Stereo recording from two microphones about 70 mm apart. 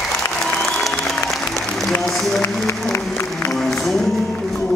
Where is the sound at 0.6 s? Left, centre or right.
Centre.